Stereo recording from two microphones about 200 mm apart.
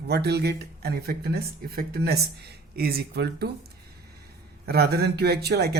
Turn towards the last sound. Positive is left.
turn(degrees=-55)  # may be behind; listen again after turning